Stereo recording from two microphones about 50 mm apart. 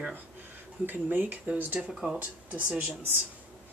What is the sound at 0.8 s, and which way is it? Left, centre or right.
Speech, right.